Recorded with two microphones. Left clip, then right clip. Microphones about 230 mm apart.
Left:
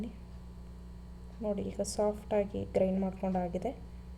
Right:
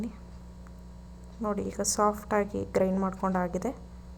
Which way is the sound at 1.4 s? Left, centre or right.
Right.